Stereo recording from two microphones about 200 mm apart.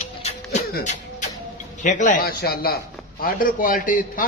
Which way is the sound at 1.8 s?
40° left (ahead or behind).